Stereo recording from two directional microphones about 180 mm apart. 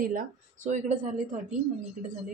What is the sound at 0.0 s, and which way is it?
Speech, 50° right (ahead or behind).